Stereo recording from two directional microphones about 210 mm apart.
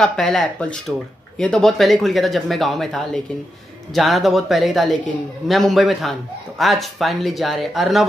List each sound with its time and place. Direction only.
0.0 s speech: 5° left (ahead or behind)